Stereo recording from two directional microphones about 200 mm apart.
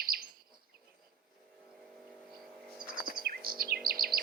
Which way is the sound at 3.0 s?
50° right (ahead or behind).